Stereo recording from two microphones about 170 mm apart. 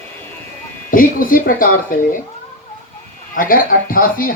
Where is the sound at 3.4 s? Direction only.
55° left (ahead or behind).